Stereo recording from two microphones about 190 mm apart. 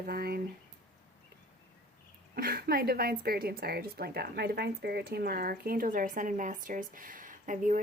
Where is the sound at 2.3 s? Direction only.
50° right (ahead or behind).